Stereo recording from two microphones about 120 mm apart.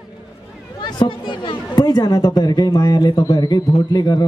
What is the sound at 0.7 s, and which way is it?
A man's voice, 40° left (ahead or behind).